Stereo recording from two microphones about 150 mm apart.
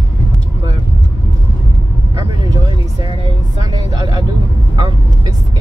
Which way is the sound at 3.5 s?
25° right (ahead or behind).